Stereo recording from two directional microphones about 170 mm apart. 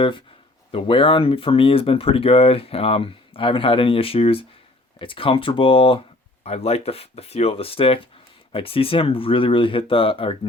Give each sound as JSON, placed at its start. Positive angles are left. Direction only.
{"t": 0.7, "sound": "speech", "side_deg": 30}